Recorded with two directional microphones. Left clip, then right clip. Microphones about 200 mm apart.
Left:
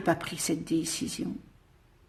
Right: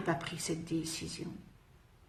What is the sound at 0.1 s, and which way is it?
Speech, 50° left (ahead or behind).